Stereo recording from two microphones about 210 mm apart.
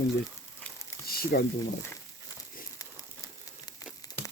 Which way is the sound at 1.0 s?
45° left (ahead or behind).